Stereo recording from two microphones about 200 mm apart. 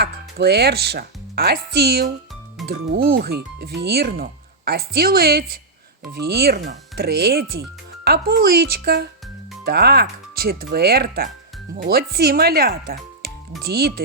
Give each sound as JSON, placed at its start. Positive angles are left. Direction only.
{"t": 0.0, "sound": "speech", "side_deg": -55}